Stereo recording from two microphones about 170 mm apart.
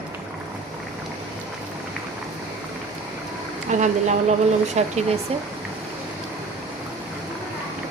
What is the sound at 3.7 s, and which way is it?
Speech, 45° right (ahead or behind).